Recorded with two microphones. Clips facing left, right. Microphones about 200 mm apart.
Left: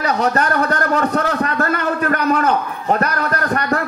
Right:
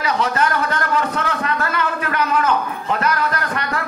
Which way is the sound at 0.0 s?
40° left (ahead or behind).